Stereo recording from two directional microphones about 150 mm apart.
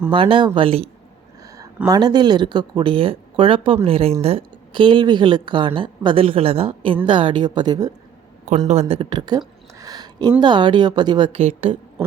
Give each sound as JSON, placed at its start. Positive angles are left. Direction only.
{"t": 0.1, "sound": "speech", "side_deg": -35}
{"t": 1.9, "sound": "speech", "side_deg": -30}
{"t": 8.4, "sound": "speech", "side_deg": -55}
{"t": 9.7, "sound": "a sound", "side_deg": -25}
{"t": 10.4, "sound": "speech", "side_deg": -30}